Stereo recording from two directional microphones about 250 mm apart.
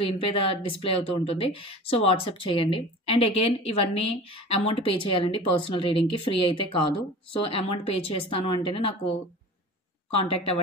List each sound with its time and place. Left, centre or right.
0.0 s speech: left
10.1 s speech: left